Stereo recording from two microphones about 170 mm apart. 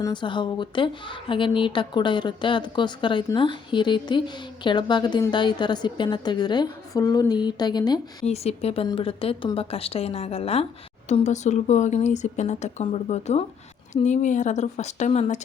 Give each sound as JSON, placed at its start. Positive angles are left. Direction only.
{"t": 0.0, "sound": "speech", "side_deg": 25}
{"t": 8.3, "sound": "speech", "side_deg": 35}